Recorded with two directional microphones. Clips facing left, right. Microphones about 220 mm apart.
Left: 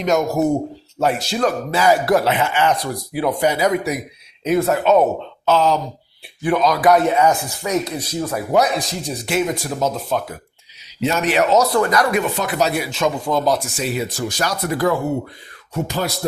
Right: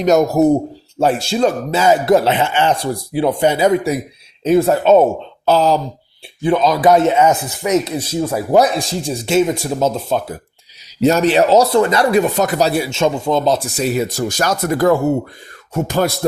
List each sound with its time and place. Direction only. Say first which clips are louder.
0.0 s a man's voice: right 5 dB; 35° right (ahead or behind)
12.2 s a man's voice: right 4 dB; 40° right (ahead or behind)
13.8 s speech: right 5 dB; 45° right (ahead or behind)